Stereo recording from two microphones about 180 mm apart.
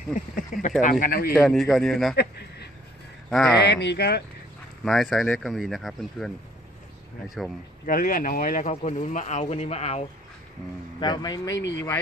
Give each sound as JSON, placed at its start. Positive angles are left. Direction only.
{"t": 0.1, "sound": "speech", "side_deg": 45}
{"t": 1.4, "sound": "speech", "side_deg": 0}
{"t": 2.1, "sound": "speech", "side_deg": 65}
{"t": 4.8, "sound": "speech", "side_deg": 0}
{"t": 7.8, "sound": "speech", "side_deg": 50}
{"t": 11.0, "sound": "speech", "side_deg": 25}